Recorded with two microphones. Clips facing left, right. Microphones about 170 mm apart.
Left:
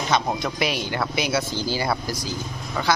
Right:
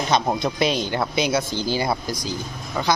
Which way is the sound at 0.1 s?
20° right (ahead or behind).